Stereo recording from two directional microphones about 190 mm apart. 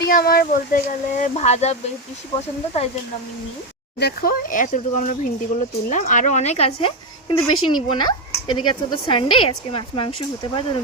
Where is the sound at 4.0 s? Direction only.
55° left (ahead or behind); by 10.1 s 30° left (ahead or behind).